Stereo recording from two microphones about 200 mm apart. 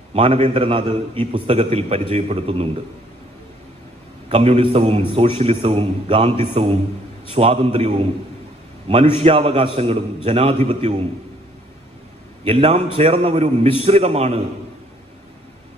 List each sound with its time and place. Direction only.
0.1 s a man's voice: 30° right (ahead or behind)
4.3 s a man's voice: 30° right (ahead or behind)
12.4 s a man's voice: 30° right (ahead or behind)